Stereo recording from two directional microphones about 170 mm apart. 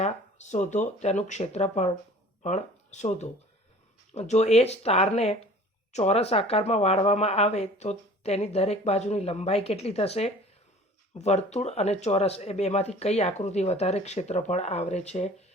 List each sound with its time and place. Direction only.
0.0 s speech: 45° left (ahead or behind)